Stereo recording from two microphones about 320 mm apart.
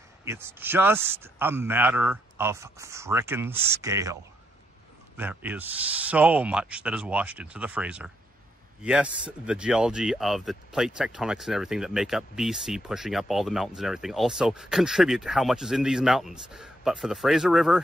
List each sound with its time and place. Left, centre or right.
0.2 s a man's voice: centre